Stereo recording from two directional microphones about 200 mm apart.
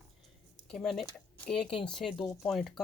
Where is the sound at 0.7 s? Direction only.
Centre (ahead or behind).